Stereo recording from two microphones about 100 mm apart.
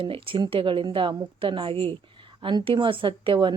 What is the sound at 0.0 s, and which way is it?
Speech, 60° right (ahead or behind).